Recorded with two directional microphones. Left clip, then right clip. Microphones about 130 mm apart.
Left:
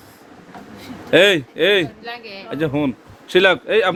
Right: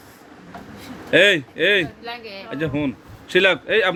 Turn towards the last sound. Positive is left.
turn(degrees=25)  # may be behind; listen again after turning